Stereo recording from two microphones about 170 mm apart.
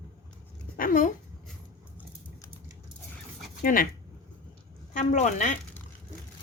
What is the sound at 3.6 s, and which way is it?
Speech, 55° left (ahead or behind).